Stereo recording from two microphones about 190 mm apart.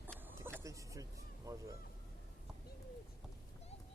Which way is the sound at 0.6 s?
15° right (ahead or behind).